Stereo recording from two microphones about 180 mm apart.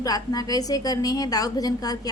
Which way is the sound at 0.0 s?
20° left (ahead or behind).